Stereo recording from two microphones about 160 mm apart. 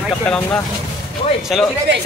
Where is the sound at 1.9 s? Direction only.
90° right.